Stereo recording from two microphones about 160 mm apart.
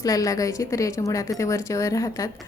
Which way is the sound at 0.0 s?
20° left (ahead or behind).